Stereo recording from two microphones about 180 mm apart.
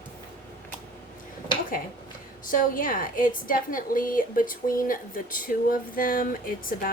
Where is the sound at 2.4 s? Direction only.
50° left (ahead or behind).